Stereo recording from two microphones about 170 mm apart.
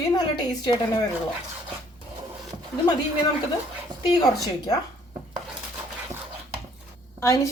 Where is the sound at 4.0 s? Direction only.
25° left (ahead or behind).